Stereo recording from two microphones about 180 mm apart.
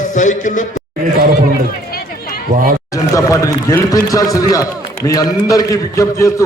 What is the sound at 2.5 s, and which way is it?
Speech, 45° right (ahead or behind).